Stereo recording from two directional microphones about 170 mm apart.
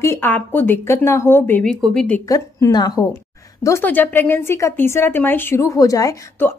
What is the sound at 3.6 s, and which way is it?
A woman's voice, 10° left (ahead or behind).